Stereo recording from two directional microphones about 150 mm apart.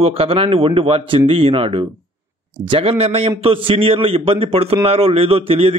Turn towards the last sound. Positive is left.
turn(degrees=-40)  # may be behind; listen again after turning